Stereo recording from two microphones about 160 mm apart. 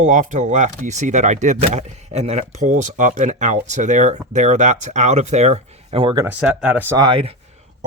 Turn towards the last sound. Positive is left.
turn(degrees=-30)  # may be behind; listen again after turning